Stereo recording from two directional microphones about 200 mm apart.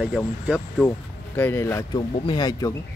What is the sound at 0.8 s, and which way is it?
Speech, 10° left (ahead or behind).